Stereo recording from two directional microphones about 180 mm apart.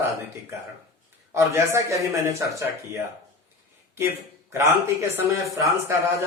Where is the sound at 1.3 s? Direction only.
15° right (ahead or behind).